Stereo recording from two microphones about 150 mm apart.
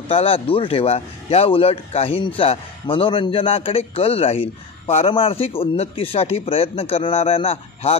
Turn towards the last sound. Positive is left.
turn(degrees=40)  # may be behind; listen again after turning